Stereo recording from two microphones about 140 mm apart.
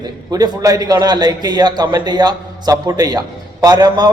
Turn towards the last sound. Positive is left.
turn(degrees=-30)  # may be behind; listen again after turning